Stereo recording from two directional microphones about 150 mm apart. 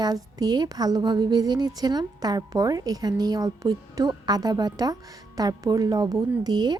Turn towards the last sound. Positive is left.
turn(degrees=-30)  # may be behind; listen again after turning